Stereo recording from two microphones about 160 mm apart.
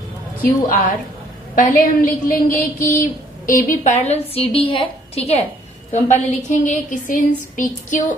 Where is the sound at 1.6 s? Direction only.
55° left (ahead or behind).